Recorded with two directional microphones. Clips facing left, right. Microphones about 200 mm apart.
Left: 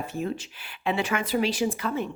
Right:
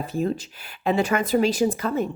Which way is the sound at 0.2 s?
40° right (ahead or behind).